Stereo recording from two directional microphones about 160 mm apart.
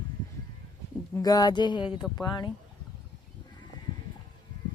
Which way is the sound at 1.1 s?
25° left (ahead or behind).